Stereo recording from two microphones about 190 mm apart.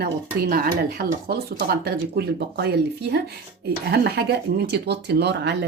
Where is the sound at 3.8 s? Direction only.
55° right (ahead or behind).